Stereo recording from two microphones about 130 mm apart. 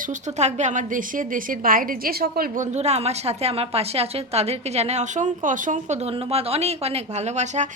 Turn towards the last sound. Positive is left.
turn(degrees=-60)  # may be behind; listen again after turning